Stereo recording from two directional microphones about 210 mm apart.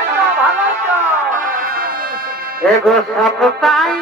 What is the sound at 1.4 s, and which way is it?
Music, 45° right (ahead or behind).